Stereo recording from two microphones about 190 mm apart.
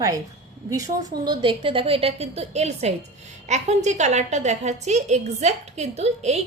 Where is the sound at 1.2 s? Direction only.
25° right (ahead or behind).